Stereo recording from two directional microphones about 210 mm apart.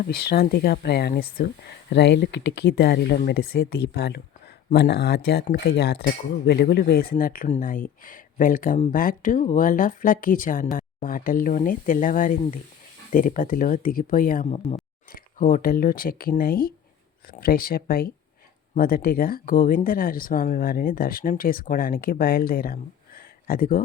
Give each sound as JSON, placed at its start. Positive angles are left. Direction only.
{"t": 0.0, "sound": "speech", "side_deg": 45}
{"t": 1.9, "sound": "speech", "side_deg": 55}